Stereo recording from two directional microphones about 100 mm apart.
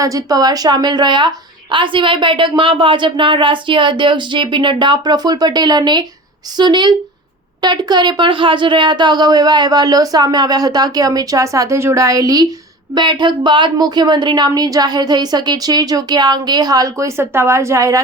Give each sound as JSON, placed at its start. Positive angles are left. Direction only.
{"t": 0.0, "sound": "a woman's voice", "side_deg": -35}
{"t": 12.9, "sound": "speech", "side_deg": -50}